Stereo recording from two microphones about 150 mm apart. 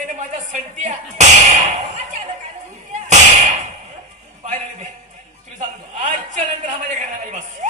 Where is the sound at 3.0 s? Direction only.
50° right (ahead or behind).